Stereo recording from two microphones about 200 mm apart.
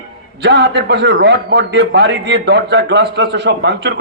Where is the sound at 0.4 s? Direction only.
60° right (ahead or behind).